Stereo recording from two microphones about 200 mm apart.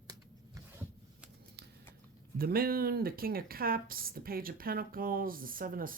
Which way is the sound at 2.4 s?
50° right (ahead or behind).